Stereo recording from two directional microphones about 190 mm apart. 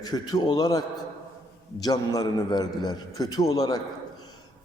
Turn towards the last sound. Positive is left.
turn(degrees=20)  # may be behind; listen again after turning